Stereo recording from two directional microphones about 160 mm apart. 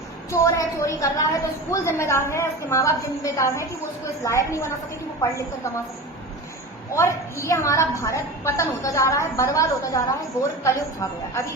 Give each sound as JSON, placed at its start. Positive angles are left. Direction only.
{"t": 0.3, "sound": "a woman's voice", "side_deg": 20}
{"t": 6.9, "sound": "a woman's voice", "side_deg": 15}